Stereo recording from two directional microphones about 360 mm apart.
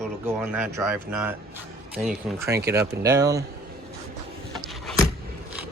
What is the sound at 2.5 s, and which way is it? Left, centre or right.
Speech, centre.